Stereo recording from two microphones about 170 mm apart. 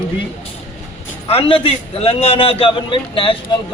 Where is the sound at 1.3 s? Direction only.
35° left (ahead or behind).